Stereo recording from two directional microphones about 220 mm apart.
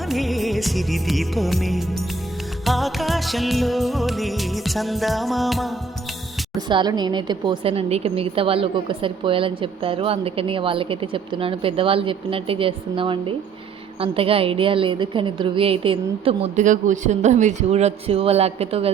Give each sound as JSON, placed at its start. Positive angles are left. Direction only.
{"t": 0.1, "sound": "music", "side_deg": 0}
{"t": 6.6, "sound": "a woman's voice", "side_deg": -20}